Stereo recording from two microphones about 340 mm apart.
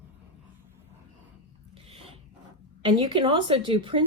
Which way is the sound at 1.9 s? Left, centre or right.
Centre.